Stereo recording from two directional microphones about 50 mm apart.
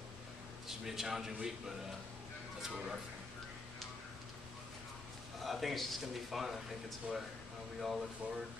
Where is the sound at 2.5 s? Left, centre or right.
Centre.